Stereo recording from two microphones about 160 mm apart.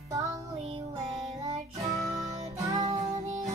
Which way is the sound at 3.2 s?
45° right (ahead or behind).